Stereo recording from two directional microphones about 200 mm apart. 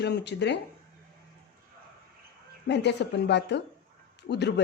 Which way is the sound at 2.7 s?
60° left (ahead or behind).